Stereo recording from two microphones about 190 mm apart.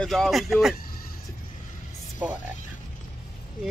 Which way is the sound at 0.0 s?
Centre (ahead or behind).